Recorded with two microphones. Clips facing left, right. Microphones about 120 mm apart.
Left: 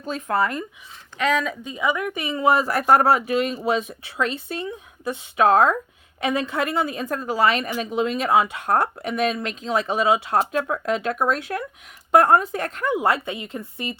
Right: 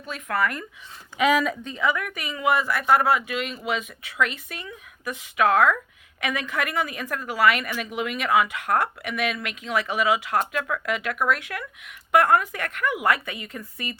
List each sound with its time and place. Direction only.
0.0 s speech: 30° left (ahead or behind)
1.2 s speech: 5° right (ahead or behind)
1.6 s speech: 15° left (ahead or behind)